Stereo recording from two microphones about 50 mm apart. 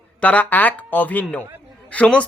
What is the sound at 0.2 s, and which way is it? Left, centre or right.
Speech, left.